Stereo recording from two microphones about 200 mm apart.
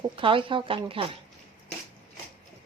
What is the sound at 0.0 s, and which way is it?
Speech, 25° right (ahead or behind).